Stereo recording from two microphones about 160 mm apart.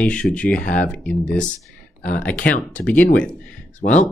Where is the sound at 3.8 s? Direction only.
50° left (ahead or behind).